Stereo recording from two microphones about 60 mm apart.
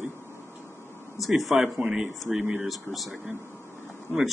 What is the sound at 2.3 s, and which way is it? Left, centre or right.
Speech, right.